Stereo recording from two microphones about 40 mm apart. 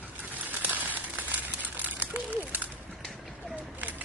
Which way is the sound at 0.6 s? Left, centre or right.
Right.